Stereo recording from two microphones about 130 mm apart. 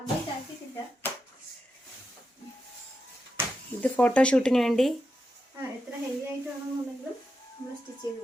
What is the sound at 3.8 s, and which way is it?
A woman's voice, 10° left (ahead or behind).